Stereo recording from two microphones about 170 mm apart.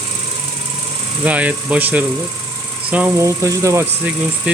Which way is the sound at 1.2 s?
10° right (ahead or behind).